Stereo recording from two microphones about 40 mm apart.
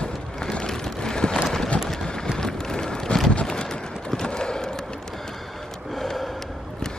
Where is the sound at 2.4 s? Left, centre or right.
Centre.